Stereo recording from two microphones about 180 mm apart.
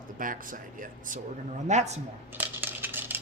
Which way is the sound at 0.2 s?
50° right (ahead or behind).